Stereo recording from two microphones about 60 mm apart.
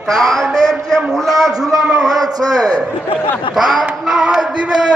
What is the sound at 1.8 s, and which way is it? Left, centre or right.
Speech, centre.